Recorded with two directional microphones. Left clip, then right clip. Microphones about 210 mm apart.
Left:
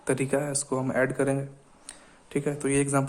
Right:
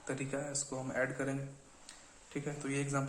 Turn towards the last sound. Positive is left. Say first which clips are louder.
# left 12 dB
turn(degrees=55)  # may be behind; listen again after turning